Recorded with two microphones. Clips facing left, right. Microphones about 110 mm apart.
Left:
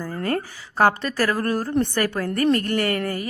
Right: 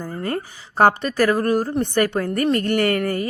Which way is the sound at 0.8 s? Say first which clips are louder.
Right 3 dB; 20° right (ahead or behind).